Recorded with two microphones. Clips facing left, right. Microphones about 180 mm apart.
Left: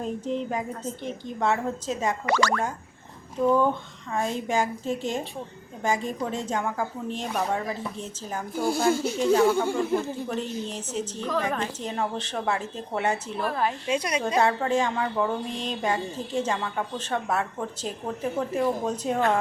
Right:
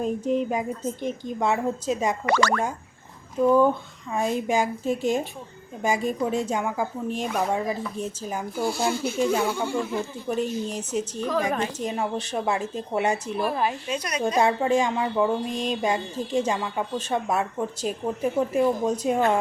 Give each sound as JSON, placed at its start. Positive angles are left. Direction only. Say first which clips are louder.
{"t": 0.0, "sound": "a woman's voice", "louder": "right 5 dB", "side_deg": -10}
{"t": 2.2, "sound": "speech", "louder": "right 1 dB", "side_deg": -55}
{"t": 3.4, "sound": "a woman's voice", "louder": "right 3 dB", "side_deg": -10}
{"t": 8.6, "sound": "speech", "louder": "left 3 dB", "side_deg": 50}
{"t": 9.1, "sound": "a woman's voice", "louder": "right 1 dB", "side_deg": -10}
{"t": 9.5, "sound": "speech", "louder": "left 3 dB", "side_deg": 50}
{"t": 10.2, "sound": "a woman's voice", "louder": "right 4 dB", "side_deg": -10}
{"t": 13.8, "sound": "a woman's voice", "louder": "left 3 dB", "side_deg": 25}
{"t": 14.3, "sound": "a woman's voice", "louder": "right 2 dB", "side_deg": -10}